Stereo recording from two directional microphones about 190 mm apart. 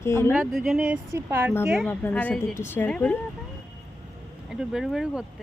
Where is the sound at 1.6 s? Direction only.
Centre (ahead or behind).